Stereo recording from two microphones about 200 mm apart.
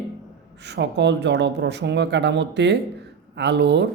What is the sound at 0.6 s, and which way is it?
Speech, 60° right (ahead or behind).